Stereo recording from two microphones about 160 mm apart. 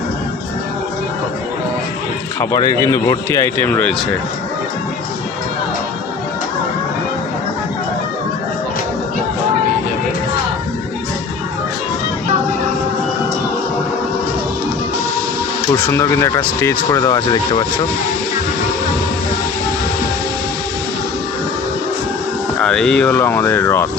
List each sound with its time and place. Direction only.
2.4 s speech: 20° left (ahead or behind)
15.7 s speech: 15° left (ahead or behind)
17.2 s speech: 35° left (ahead or behind)
22.6 s speech: 5° left (ahead or behind)